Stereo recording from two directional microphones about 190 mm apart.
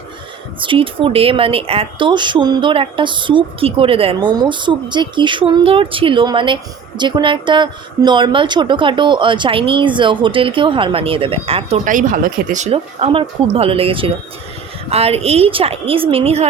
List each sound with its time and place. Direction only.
0.6 s speech: 25° right (ahead or behind)
11.9 s speech: 45° right (ahead or behind)